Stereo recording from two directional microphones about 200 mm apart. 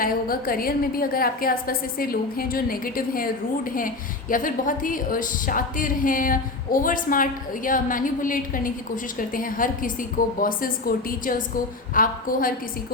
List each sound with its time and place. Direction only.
0.0 s a woman's voice: 45° left (ahead or behind)